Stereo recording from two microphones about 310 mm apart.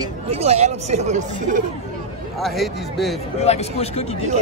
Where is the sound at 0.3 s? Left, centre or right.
Centre.